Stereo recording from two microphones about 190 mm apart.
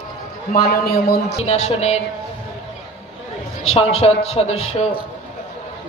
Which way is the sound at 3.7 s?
35° left (ahead or behind).